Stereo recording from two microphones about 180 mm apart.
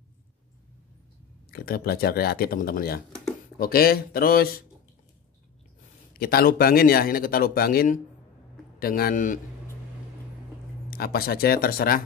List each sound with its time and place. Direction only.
1.5 s speech: 60° left (ahead or behind)
6.1 s speech: 55° left (ahead or behind)
10.9 s speech: 60° left (ahead or behind)